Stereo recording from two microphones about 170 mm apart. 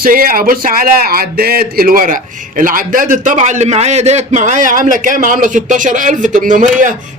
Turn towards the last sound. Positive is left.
turn(degrees=-50)  # may be behind; listen again after turning